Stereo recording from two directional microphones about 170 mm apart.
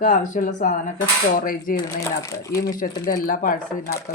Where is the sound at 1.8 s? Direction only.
20° left (ahead or behind).